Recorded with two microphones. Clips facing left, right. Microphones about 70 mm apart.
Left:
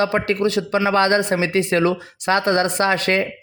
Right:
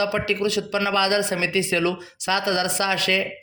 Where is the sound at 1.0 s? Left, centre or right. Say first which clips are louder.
Left 4 dB; left.